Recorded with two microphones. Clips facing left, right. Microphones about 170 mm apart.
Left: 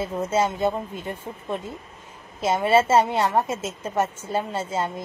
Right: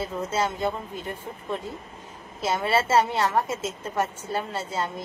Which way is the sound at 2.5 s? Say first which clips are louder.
Left 4 dB; 15° left (ahead or behind).